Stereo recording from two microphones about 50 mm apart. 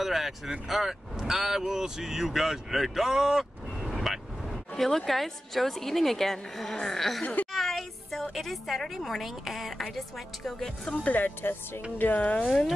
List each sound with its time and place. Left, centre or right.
0.0 s a woman's voice: centre
11.1 s speech: left
12.0 s speech: left